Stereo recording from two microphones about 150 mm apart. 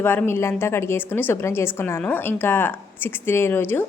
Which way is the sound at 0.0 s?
15° left (ahead or behind).